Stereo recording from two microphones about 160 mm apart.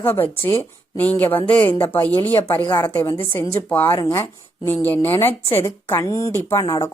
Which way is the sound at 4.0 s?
25° left (ahead or behind).